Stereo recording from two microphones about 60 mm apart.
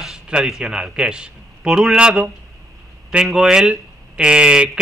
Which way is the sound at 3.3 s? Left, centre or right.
Centre.